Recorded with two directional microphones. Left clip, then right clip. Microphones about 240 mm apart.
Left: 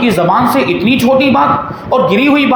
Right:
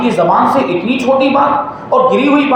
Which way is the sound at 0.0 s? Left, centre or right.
Left.